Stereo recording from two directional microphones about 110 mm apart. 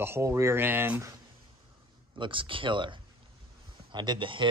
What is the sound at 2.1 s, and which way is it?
Speech, 50° right (ahead or behind).